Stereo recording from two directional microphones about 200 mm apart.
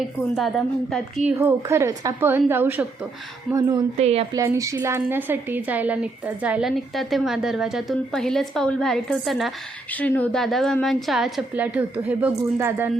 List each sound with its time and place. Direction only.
0.3 s a woman's voice: centre (ahead or behind)
1.4 s a woman's voice: 10° right (ahead or behind)
3.9 s a woman's voice: 30° right (ahead or behind)
4.3 s a woman's voice: 15° right (ahead or behind)